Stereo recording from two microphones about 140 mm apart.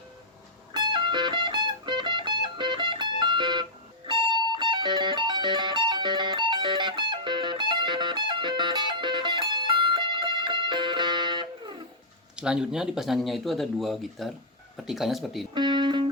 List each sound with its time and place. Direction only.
0.7 s music: 35° right (ahead or behind)
12.4 s speech: 5° right (ahead or behind)
15.5 s music: 35° right (ahead or behind)